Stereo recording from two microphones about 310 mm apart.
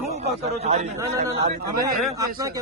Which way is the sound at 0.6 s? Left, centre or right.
Right.